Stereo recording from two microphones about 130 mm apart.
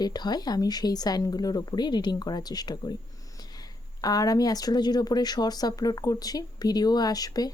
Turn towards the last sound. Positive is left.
turn(degrees=30)  # may be behind; listen again after turning